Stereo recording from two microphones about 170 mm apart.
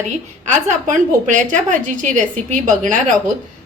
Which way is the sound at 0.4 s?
45° right (ahead or behind).